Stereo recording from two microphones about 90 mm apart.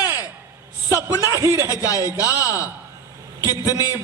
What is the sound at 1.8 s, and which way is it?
Speech, 40° left (ahead or behind).